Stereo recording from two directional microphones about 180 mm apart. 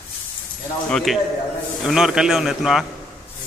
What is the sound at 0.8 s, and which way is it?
Speech, centre (ahead or behind).